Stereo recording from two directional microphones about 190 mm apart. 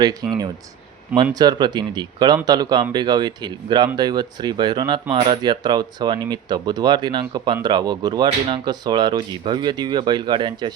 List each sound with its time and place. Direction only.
0.0 s speech: 20° right (ahead or behind)
1.4 s speech: 20° right (ahead or behind)